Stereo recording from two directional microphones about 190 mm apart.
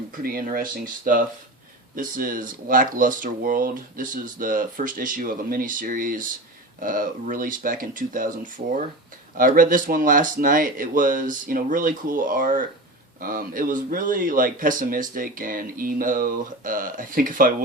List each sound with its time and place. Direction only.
0.2 s speech: 50° right (ahead or behind)